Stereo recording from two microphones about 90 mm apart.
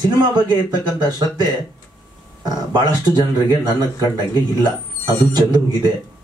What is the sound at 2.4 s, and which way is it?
Speech, 50° right (ahead or behind).